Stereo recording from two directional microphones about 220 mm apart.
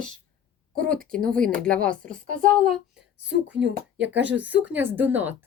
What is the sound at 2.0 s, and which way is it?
Speech, 35° right (ahead or behind).